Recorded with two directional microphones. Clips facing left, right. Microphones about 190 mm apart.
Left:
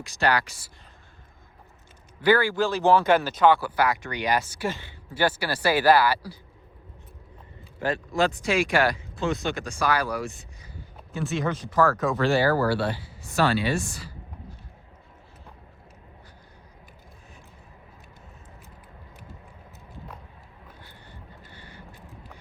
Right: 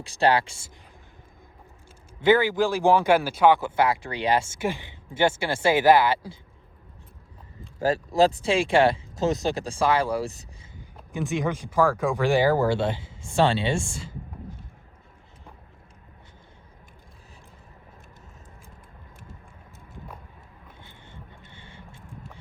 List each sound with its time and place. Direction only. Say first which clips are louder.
0.0 s speech: right 3 dB; 30° right (ahead or behind)
2.2 s speech: right 2 dB; 20° right (ahead or behind)
3.6 s speech: right 1 dB; 25° right (ahead or behind)
4.6 s speech: right 2 dB; 15° right (ahead or behind)
7.8 s speech: right 4 dB; 35° right (ahead or behind)
10.8 s speech: right 1 dB; 15° right (ahead or behind)